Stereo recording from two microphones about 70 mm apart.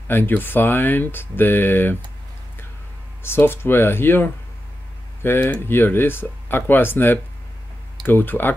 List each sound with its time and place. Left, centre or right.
0.1 s speech: left
3.2 s speech: left